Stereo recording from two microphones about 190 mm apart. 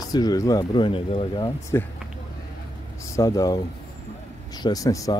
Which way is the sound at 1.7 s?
15° left (ahead or behind).